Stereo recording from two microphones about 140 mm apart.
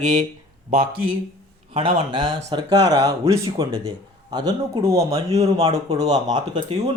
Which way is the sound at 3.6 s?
35° right (ahead or behind).